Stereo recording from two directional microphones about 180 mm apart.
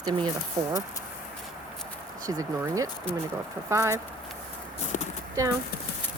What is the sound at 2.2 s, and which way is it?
Speech, 20° right (ahead or behind).